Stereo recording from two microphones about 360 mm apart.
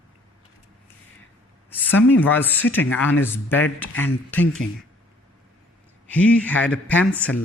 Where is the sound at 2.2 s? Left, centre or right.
Centre.